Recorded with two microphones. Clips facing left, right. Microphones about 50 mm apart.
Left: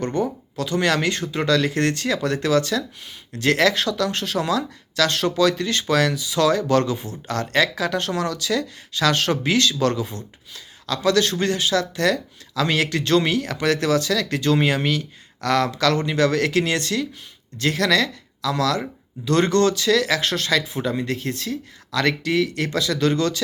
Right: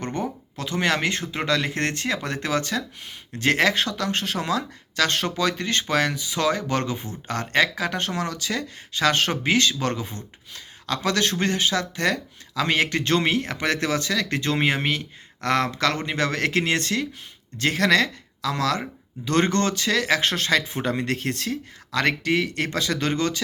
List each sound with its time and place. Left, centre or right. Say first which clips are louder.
0.0 s speech: left 5 dB; right